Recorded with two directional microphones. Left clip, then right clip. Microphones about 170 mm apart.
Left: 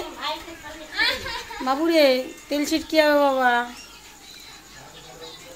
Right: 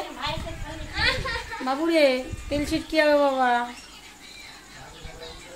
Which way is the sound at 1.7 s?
20° left (ahead or behind).